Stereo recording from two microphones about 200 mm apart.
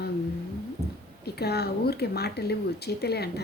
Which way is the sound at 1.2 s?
55° left (ahead or behind).